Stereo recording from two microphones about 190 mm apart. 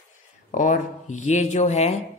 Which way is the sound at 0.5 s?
40° left (ahead or behind).